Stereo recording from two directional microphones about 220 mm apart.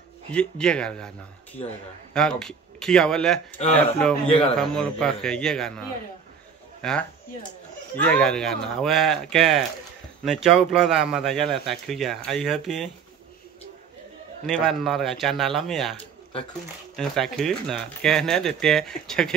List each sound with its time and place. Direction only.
0.3 s speech: 5° left (ahead or behind)
4.3 s a man's voice: 25° left (ahead or behind)
4.6 s speech: 5° left (ahead or behind)
14.4 s speech: centre (ahead or behind)